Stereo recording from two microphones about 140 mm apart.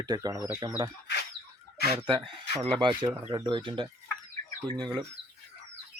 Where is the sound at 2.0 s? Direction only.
35° right (ahead or behind).